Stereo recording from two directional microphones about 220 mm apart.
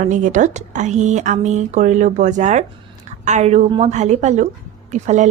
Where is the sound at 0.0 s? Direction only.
35° right (ahead or behind).